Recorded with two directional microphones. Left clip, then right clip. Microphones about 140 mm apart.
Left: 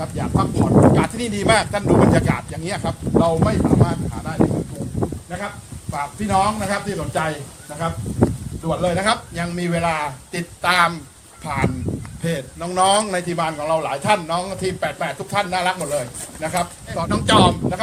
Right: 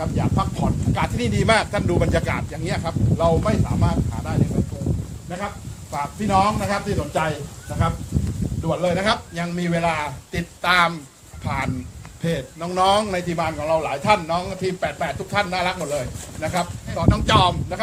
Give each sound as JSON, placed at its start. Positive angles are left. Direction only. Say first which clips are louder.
{"t": 0.0, "sound": "speech", "louder": "left 1 dB", "side_deg": 0}
{"t": 2.6, "sound": "speech", "louder": "even", "side_deg": 15}
{"t": 3.4, "sound": "speech", "louder": "left 5 dB", "side_deg": 0}
{"t": 5.9, "sound": "speech", "louder": "even", "side_deg": 0}
{"t": 8.6, "sound": "a man's voice", "louder": "left 1 dB", "side_deg": 10}